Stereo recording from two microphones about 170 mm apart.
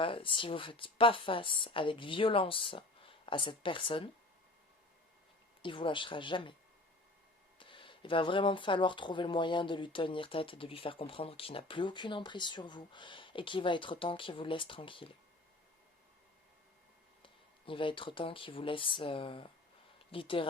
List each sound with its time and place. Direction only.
0.0 s speech: 30° left (ahead or behind)
5.6 s speech: 30° left (ahead or behind)
7.6 s speech: 30° left (ahead or behind)
17.2 s speech: 30° left (ahead or behind)